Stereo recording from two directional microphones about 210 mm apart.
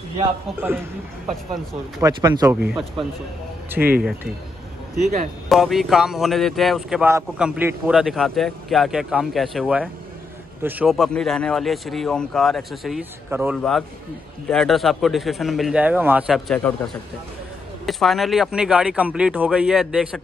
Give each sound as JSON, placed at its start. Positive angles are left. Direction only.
{"t": 2.0, "sound": "speech", "side_deg": -20}
{"t": 2.7, "sound": "a man's voice", "side_deg": 0}
{"t": 5.5, "sound": "a man's voice", "side_deg": 0}